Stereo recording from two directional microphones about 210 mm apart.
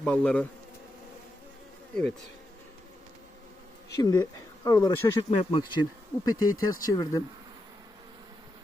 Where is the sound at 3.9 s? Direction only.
15° left (ahead or behind).